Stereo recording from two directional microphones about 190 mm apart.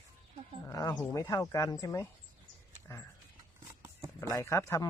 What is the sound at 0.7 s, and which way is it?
Speech, 20° left (ahead or behind).